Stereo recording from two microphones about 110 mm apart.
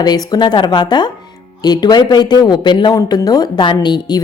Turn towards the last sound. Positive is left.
turn(degrees=40)  # may be behind; listen again after turning